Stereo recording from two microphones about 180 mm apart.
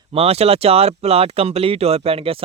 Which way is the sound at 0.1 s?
35° right (ahead or behind).